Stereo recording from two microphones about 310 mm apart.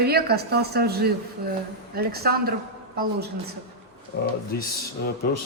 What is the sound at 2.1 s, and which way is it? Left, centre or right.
Speech, right.